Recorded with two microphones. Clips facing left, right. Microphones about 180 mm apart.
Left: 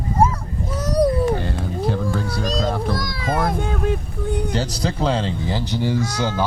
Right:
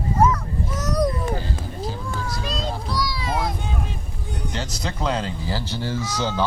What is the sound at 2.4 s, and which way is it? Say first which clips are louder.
Music: left 7 dB; 45° left (ahead or behind).